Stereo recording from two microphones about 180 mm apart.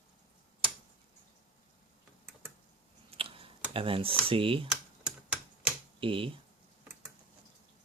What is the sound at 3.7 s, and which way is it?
Speech, 30° right (ahead or behind).